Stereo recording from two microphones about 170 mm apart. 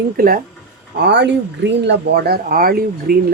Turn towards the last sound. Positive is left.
turn(degrees=-60)  # may be behind; listen again after turning